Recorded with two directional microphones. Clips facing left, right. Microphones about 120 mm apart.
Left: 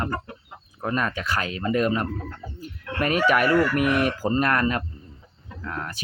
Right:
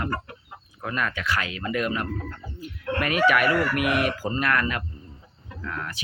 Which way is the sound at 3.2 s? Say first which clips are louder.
Left 1 dB; 40° left (ahead or behind).